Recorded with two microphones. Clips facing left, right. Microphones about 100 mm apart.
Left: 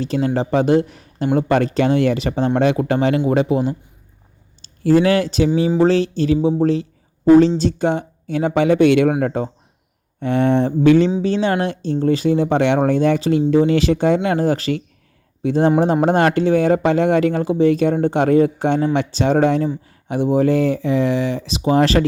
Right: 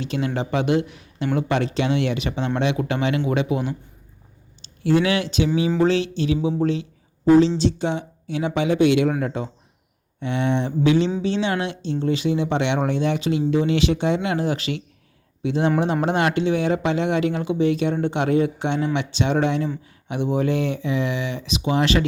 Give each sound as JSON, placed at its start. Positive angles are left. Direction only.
{"t": 0.0, "sound": "speech", "side_deg": 40}